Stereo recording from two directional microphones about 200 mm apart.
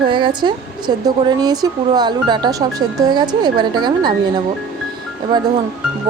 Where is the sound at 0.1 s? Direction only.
25° right (ahead or behind).